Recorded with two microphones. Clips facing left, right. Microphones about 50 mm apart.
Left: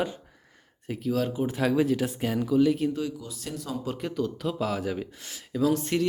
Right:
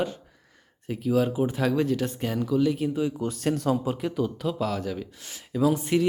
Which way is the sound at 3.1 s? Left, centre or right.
Right.